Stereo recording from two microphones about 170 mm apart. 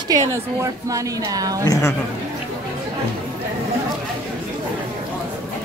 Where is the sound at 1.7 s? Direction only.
15° left (ahead or behind).